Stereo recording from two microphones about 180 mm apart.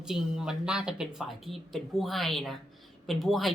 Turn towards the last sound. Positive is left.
turn(degrees=0)  # may be behind; listen again after turning